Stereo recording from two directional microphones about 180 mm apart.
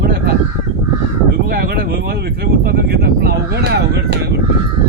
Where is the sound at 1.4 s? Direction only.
55° right (ahead or behind).